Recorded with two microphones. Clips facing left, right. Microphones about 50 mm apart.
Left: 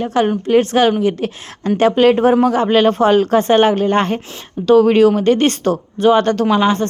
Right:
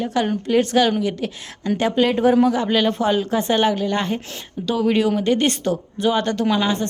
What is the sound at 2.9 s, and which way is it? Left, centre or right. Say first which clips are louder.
A woman's voice: left 7 dB; left.